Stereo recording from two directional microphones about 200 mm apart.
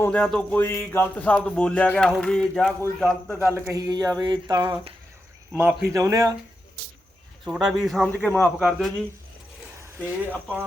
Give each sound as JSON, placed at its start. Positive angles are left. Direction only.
{"t": 0.0, "sound": "speech", "side_deg": 5}
{"t": 3.4, "sound": "speech", "side_deg": -15}
{"t": 7.4, "sound": "speech", "side_deg": 0}